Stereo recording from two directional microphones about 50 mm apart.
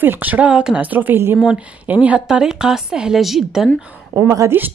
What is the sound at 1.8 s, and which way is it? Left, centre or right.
Speech, right.